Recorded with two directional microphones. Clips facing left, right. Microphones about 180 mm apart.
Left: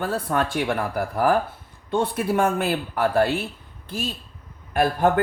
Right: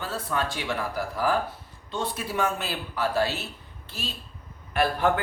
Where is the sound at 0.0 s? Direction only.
55° left (ahead or behind).